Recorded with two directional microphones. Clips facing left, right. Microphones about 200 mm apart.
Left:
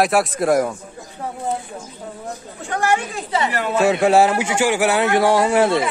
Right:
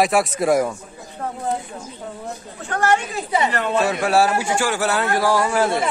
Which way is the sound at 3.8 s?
25° left (ahead or behind).